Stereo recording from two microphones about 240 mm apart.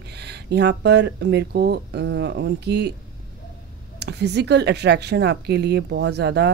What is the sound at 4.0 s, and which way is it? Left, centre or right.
Speech, right.